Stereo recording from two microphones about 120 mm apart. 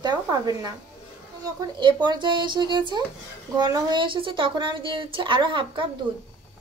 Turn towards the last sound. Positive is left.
turn(degrees=-40)  # may be behind; listen again after turning